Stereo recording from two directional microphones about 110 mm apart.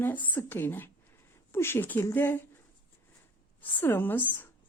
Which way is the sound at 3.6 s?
20° left (ahead or behind).